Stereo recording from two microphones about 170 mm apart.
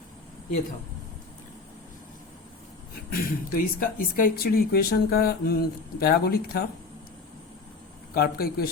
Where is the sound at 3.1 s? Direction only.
60° left (ahead or behind).